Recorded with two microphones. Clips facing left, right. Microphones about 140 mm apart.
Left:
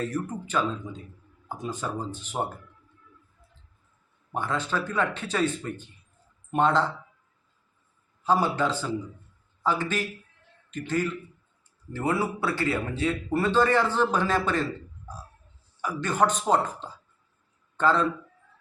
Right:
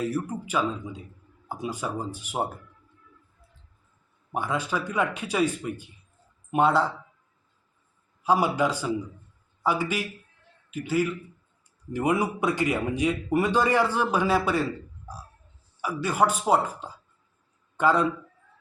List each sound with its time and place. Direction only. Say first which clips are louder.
0.0 s a man's voice: right 2 dB; 10° right (ahead or behind)
4.3 s a man's voice: right 1 dB; 10° right (ahead or behind)
8.2 s a man's voice: right 1 dB; 10° right (ahead or behind)
15.1 s music: even; 10° right (ahead or behind)
15.8 s a man's voice: right 1 dB; 10° right (ahead or behind)